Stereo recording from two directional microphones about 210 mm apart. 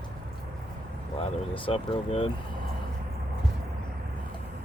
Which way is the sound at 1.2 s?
25° left (ahead or behind).